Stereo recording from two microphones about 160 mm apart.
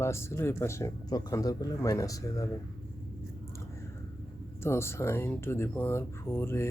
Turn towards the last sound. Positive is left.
turn(degrees=15)  # may be behind; listen again after turning